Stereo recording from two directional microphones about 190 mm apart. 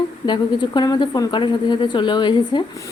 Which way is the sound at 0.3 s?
25° left (ahead or behind).